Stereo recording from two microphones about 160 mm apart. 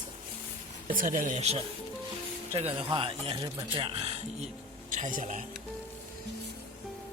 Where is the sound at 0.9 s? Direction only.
60° right (ahead or behind); by 4.1 s 35° right (ahead or behind).